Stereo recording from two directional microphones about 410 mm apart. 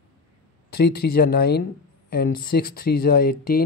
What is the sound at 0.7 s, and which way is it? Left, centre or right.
Speech, left.